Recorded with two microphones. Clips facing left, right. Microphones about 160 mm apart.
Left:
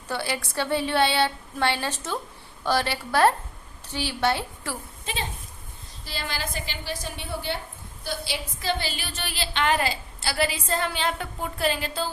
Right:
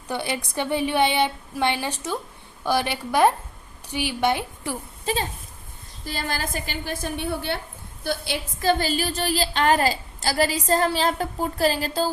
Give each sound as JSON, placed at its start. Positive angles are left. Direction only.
{"t": 0.1, "sound": "a woman's voice", "side_deg": -20}
{"t": 6.1, "sound": "a woman's voice", "side_deg": -45}